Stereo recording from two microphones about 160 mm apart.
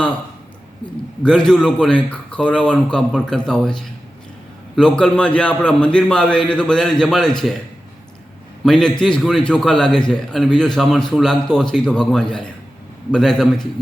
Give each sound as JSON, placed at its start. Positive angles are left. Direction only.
{"t": 1.2, "sound": "a man's voice", "side_deg": 5}
{"t": 8.6, "sound": "a man's voice", "side_deg": 5}